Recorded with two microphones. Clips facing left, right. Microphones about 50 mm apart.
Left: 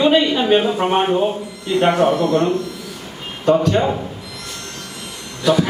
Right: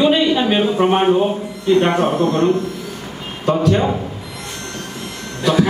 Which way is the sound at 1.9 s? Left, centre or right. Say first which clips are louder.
Left 1 dB; right.